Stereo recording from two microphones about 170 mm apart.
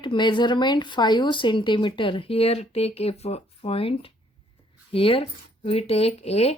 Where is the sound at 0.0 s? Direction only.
30° left (ahead or behind).